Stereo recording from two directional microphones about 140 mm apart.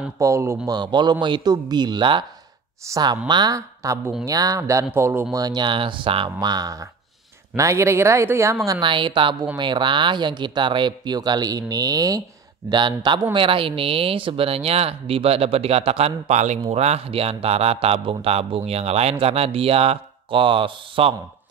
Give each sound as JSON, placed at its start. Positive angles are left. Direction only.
{"t": 0.2, "sound": "a woman's voice", "side_deg": -20}
{"t": 5.4, "sound": "a woman's voice", "side_deg": -30}
{"t": 8.8, "sound": "speech", "side_deg": -35}